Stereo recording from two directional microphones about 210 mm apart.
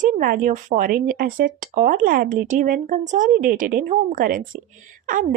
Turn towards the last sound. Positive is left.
turn(degrees=-40)  # may be behind; listen again after turning